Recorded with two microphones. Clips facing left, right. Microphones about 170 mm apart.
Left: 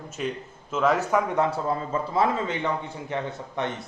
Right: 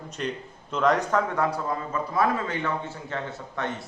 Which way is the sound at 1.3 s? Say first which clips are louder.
Left 2 dB; 25° left (ahead or behind).